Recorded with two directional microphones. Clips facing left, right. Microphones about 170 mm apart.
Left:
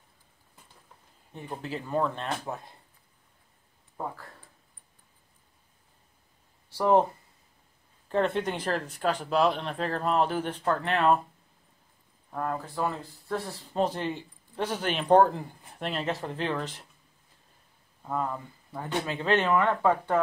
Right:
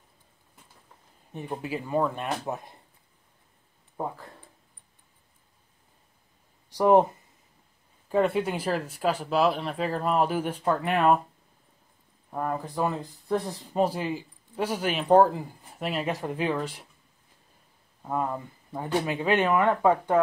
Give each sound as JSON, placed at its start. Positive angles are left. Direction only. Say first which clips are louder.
{"t": 1.3, "sound": "speech", "louder": "right 3 dB", "side_deg": -15}
{"t": 3.9, "sound": "a sound", "louder": "right 3 dB", "side_deg": -20}
{"t": 6.7, "sound": "speech", "louder": "right 3 dB", "side_deg": -15}
{"t": 8.1, "sound": "speech", "louder": "right 3 dB", "side_deg": -10}
{"t": 12.3, "sound": "speech", "louder": "right 2 dB", "side_deg": -15}
{"t": 18.0, "sound": "speech", "louder": "right 2 dB", "side_deg": -15}